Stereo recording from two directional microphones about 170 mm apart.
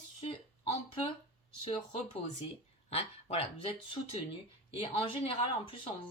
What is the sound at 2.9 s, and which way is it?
Speech, 35° left (ahead or behind).